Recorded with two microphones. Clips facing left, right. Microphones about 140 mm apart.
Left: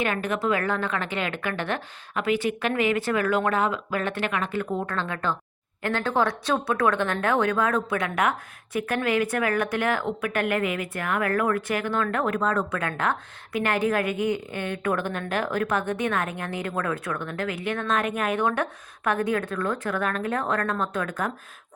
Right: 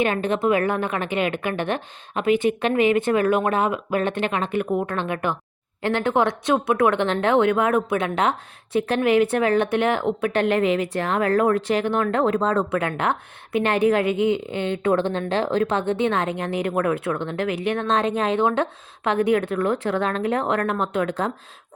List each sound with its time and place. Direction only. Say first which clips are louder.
0.0 s speech: right 5 dB; 25° right (ahead or behind)